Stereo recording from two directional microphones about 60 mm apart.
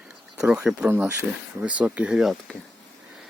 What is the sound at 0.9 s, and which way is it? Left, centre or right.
Speech, right.